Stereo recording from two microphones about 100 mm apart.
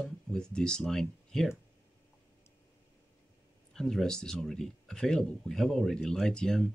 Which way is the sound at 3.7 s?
5° left (ahead or behind).